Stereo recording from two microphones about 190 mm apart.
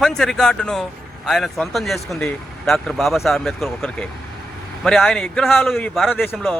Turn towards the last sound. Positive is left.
turn(degrees=0)  # may be behind; listen again after turning